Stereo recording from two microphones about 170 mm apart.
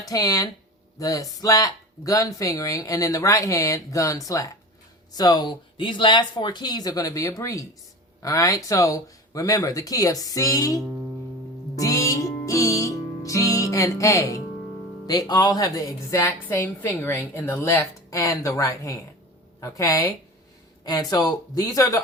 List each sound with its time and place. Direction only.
0.0 s speech: 20° left (ahead or behind)
11.8 s music: 20° left (ahead or behind)
15.0 s speech: 25° left (ahead or behind)